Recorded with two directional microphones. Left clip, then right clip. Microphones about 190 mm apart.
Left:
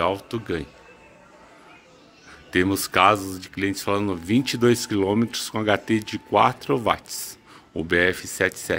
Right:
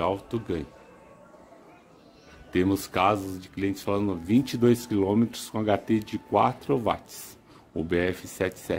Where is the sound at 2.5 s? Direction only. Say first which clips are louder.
Left 4 dB; centre (ahead or behind).